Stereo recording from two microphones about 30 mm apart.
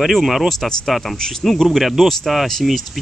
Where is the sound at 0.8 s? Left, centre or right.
Centre.